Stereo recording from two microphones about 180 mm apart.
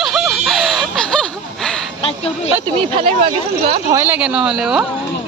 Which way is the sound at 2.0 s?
30° left (ahead or behind).